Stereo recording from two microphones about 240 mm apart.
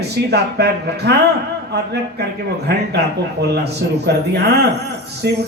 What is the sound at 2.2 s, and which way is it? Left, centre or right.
Speech, right.